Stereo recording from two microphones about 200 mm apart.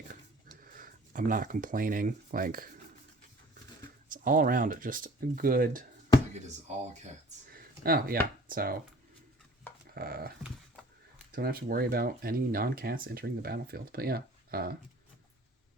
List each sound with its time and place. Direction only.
0.6 s speech: 40° right (ahead or behind)
4.1 s speech: 45° right (ahead or behind)
7.5 s a sound: 50° right (ahead or behind)
8.4 s speech: 45° right (ahead or behind)
9.9 s dog: 50° right (ahead or behind)
11.3 s speech: 50° right (ahead or behind)